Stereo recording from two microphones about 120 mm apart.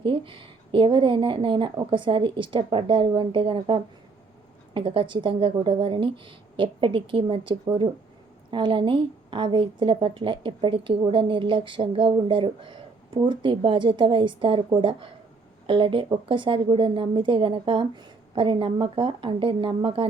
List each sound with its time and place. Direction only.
0.0 s a woman's voice: 45° right (ahead or behind)
15.6 s a woman's voice: 45° right (ahead or behind)